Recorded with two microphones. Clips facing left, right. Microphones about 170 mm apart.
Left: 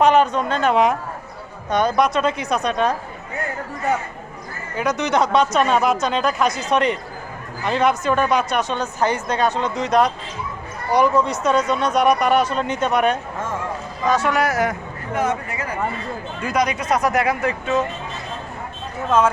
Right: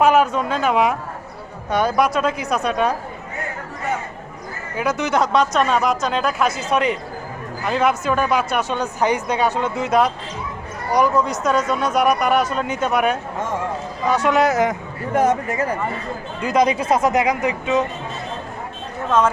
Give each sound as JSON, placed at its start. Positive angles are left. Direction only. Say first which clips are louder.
{"t": 0.0, "sound": "speech", "louder": "even", "side_deg": -5}
{"t": 4.8, "sound": "speech", "louder": "even", "side_deg": -5}
{"t": 14.1, "sound": "speech", "louder": "right 2 dB", "side_deg": -15}
{"t": 15.1, "sound": "speech", "louder": "right 5 dB", "side_deg": -45}
{"t": 16.4, "sound": "speech", "louder": "right 4 dB", "side_deg": -25}